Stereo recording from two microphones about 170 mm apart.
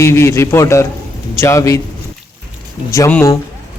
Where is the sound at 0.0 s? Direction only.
15° left (ahead or behind).